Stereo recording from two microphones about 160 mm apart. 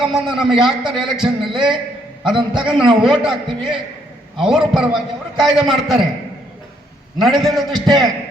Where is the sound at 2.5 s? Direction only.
5° right (ahead or behind).